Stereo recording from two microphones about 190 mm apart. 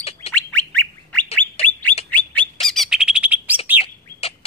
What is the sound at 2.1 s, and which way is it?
Bird, 10° left (ahead or behind).